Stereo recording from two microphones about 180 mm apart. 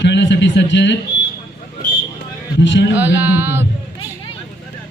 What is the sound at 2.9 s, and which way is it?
Music, 10° right (ahead or behind).